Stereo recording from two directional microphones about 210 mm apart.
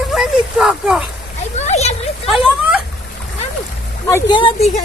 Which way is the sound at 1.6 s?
30° left (ahead or behind).